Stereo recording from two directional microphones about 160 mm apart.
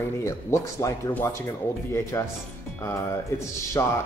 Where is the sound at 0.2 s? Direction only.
20° left (ahead or behind).